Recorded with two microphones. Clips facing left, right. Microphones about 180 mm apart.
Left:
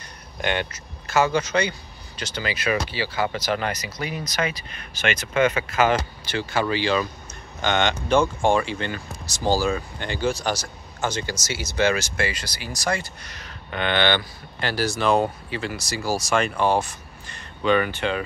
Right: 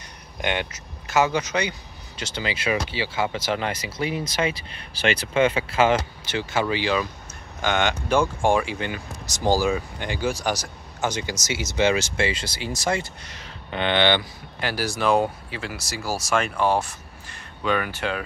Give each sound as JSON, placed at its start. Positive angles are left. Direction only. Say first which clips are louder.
{"t": 0.4, "sound": "speech", "louder": "left 1 dB", "side_deg": -15}